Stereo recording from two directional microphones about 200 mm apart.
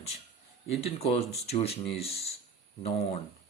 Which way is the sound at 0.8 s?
30° left (ahead or behind).